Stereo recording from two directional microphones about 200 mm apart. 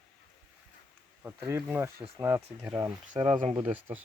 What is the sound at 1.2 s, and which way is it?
Speech, 15° right (ahead or behind).